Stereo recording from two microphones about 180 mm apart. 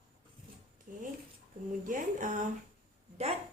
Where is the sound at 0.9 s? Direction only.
45° right (ahead or behind).